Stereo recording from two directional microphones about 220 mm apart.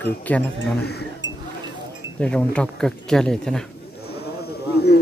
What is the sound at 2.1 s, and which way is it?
Speech, 5° left (ahead or behind).